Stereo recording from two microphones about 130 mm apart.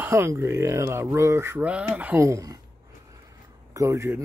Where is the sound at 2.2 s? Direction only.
25° right (ahead or behind).